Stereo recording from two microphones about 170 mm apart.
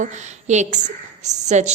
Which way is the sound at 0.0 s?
45° right (ahead or behind).